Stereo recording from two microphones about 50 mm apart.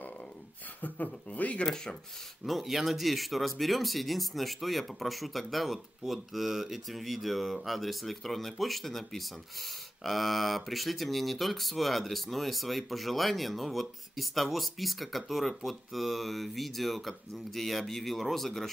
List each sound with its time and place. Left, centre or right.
0.7 s speech: left
2.4 s speech: centre